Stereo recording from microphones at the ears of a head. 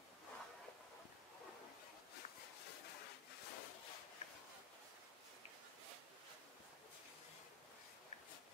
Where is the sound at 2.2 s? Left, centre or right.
Left.